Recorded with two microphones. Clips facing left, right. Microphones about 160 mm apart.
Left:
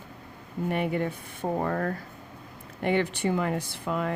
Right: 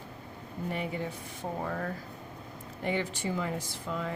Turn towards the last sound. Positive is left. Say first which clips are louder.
# left 6 dB
turn(degrees=65)  # may be behind; listen again after turning